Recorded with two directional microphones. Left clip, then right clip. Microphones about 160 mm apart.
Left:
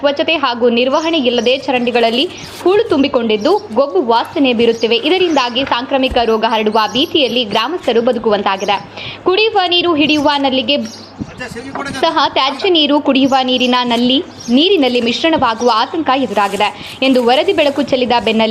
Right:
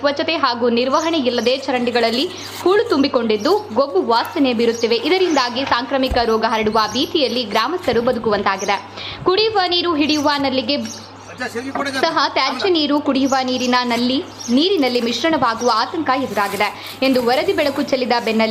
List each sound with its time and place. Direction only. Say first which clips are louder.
0.0 s a woman's voice: left 4 dB; 10° left (ahead or behind)
11.9 s a woman's voice: left 5 dB; 20° left (ahead or behind)